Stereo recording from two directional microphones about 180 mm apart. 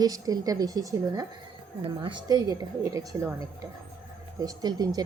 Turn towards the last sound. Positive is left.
turn(degrees=-20)  # may be behind; listen again after turning